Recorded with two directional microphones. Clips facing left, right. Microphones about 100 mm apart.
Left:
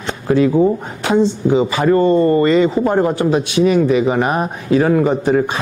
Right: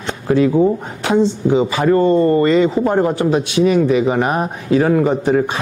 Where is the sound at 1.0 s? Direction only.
25° left (ahead or behind).